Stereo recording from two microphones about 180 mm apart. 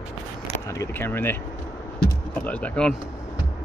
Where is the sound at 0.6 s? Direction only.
15° left (ahead or behind).